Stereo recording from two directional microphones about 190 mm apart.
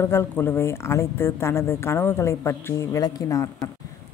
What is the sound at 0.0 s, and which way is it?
Speech, 10° left (ahead or behind).